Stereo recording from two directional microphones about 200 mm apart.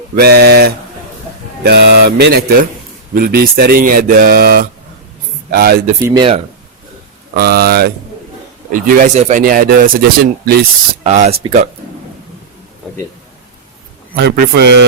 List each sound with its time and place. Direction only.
0.2 s speech: 55° right (ahead or behind)
6.0 s speech: 15° right (ahead or behind)
7.3 s speech: 50° right (ahead or behind)
8.7 s speech: 40° right (ahead or behind)
11.0 s speech: 30° right (ahead or behind)
14.2 s a man's voice: 50° right (ahead or behind)